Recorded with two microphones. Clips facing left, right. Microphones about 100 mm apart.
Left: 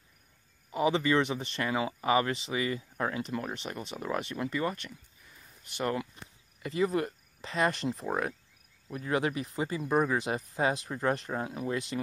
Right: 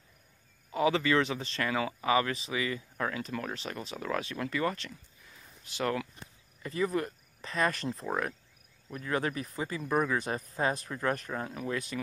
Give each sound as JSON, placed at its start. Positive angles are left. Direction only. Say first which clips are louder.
{"t": 0.7, "sound": "speech", "louder": "even", "side_deg": 20}
{"t": 8.0, "sound": "cricket", "louder": "right 1 dB", "side_deg": 10}
{"t": 8.8, "sound": "speech", "louder": "left 2 dB", "side_deg": 20}
{"t": 11.4, "sound": "cricket", "louder": "left 2 dB", "side_deg": 10}
{"t": 11.9, "sound": "speech", "louder": "left 2 dB", "side_deg": 30}